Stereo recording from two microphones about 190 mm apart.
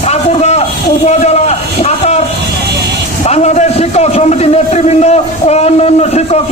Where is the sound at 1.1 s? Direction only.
35° left (ahead or behind).